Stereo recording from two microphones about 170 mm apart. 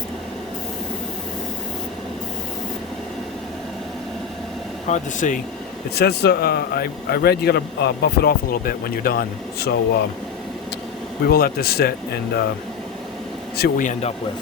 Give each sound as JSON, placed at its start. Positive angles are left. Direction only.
{"t": 4.9, "sound": "speech", "side_deg": 50}
{"t": 5.9, "sound": "speech", "side_deg": 70}
{"t": 11.3, "sound": "speech", "side_deg": 65}
{"t": 13.6, "sound": "speech", "side_deg": 50}